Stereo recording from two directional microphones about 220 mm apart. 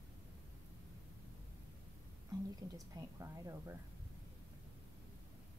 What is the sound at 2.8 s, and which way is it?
Speech, 15° right (ahead or behind).